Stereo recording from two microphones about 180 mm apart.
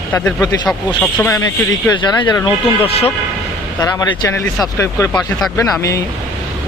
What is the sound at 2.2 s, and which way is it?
Speech, 20° left (ahead or behind).